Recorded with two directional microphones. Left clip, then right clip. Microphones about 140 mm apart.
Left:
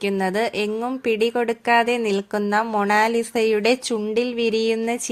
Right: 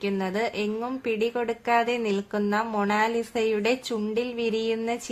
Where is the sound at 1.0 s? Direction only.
40° left (ahead or behind).